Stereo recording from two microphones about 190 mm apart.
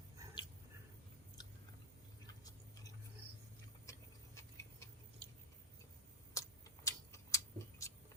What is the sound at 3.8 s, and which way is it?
Clock, 15° left (ahead or behind).